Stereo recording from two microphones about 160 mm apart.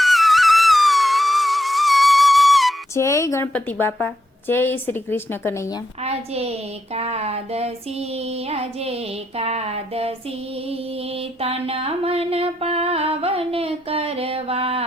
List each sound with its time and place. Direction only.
0.0 s music: centre (ahead or behind)
2.9 s speech: 20° left (ahead or behind)
6.0 s music: 40° right (ahead or behind)
11.2 s music: 40° right (ahead or behind)